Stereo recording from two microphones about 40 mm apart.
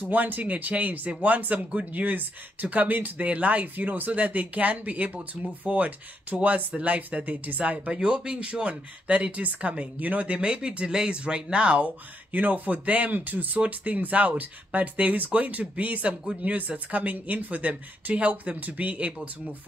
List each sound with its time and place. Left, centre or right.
0.1 s speech: right
2.0 s speech: right
8.0 s speech: right
12.3 s speech: right
13.6 s speech: right
18.9 s speech: right